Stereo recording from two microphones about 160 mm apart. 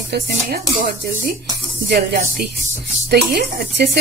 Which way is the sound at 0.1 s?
65° right (ahead or behind).